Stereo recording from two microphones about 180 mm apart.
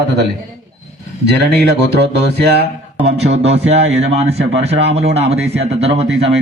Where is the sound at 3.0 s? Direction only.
35° right (ahead or behind).